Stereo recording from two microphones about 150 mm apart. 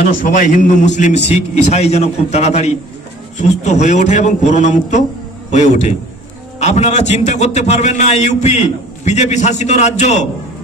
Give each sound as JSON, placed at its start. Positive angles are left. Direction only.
{"t": 0.1, "sound": "a man's voice", "side_deg": 65}